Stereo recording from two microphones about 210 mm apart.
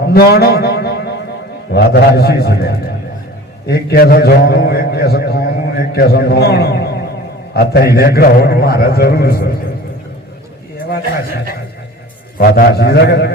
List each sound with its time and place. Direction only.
0.1 s a man's voice: 50° left (ahead or behind)
12.4 s a man's voice: 45° left (ahead or behind)